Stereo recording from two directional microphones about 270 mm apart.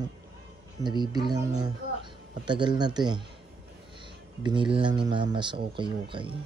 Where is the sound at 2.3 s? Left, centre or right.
Centre.